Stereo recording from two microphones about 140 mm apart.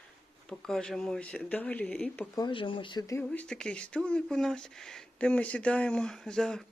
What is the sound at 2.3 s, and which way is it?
Speech, 35° left (ahead or behind).